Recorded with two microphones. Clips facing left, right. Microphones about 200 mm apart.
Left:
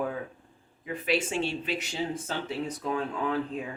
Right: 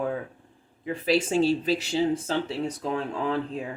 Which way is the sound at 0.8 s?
35° right (ahead or behind).